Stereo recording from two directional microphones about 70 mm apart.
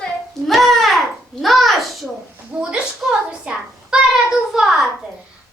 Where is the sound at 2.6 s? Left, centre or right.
Centre.